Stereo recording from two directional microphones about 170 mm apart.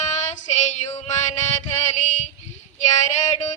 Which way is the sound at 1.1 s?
45° left (ahead or behind).